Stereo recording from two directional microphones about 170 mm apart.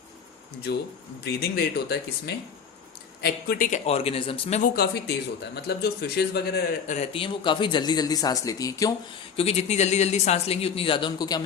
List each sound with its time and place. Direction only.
0.7 s speech: 75° left (ahead or behind)
3.7 s speech: 35° left (ahead or behind)
4.6 s speech: 65° left (ahead or behind)
6.8 s speech: 40° left (ahead or behind); by 8.9 s 20° left (ahead or behind)
9.3 s speech: 35° left (ahead or behind)